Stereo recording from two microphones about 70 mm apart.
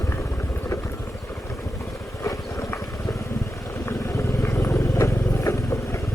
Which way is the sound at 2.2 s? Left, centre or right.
Left.